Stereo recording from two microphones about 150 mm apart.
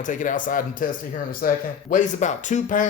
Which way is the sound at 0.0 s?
60° left (ahead or behind).